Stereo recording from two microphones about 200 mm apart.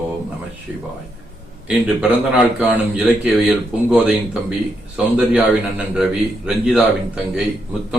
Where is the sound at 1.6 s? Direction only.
5° right (ahead or behind).